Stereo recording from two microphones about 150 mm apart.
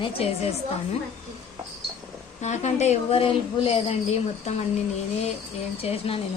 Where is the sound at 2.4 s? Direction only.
50° left (ahead or behind).